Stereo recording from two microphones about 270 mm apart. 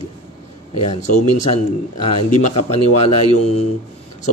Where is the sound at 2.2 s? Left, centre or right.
Left.